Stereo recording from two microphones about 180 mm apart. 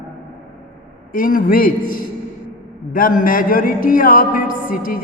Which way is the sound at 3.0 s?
50° left (ahead or behind).